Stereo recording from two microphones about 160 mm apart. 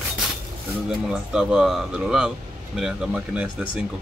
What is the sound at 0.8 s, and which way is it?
Speech, 5° right (ahead or behind).